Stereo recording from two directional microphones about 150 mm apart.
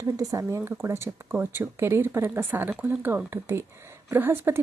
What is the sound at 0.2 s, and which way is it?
Speech, 20° right (ahead or behind).